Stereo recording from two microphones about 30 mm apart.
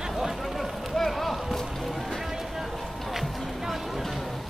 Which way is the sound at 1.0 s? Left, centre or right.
Centre.